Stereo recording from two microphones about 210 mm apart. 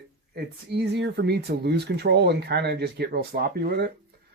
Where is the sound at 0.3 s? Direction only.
50° right (ahead or behind).